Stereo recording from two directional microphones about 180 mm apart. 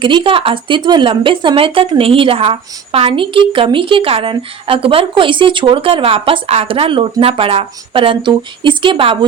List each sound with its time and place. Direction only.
0.0 s speech: 25° right (ahead or behind)